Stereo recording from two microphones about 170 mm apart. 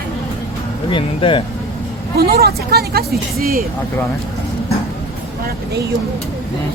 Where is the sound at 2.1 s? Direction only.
65° right (ahead or behind).